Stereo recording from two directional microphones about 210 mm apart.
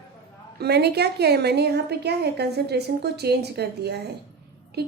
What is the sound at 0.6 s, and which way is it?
A woman's voice, 50° right (ahead or behind).